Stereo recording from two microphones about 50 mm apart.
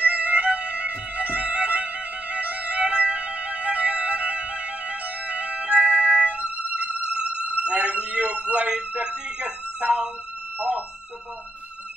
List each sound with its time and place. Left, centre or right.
0.0 s music: right